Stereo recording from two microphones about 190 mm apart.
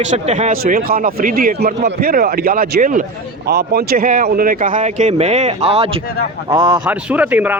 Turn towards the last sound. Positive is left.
turn(degrees=-10)  # may be behind; listen again after turning